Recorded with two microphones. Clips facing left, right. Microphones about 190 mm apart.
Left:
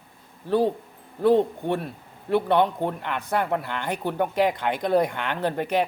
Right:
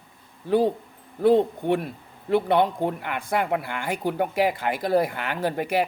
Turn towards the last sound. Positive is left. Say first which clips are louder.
# even
turn(degrees=-10)  # may be behind; listen again after turning